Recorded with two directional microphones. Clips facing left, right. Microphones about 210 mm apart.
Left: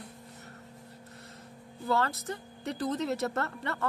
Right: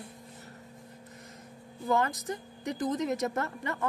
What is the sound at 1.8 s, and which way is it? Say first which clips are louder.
A woman's voice: right 1 dB; 15° right (ahead or behind).